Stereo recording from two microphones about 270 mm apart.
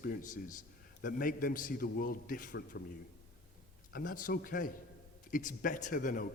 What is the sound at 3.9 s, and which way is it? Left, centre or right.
A man's voice, left.